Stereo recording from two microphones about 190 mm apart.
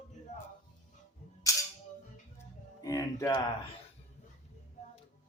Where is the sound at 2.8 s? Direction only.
20° left (ahead or behind).